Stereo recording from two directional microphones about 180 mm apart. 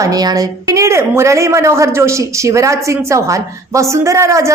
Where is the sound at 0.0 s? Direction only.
20° right (ahead or behind).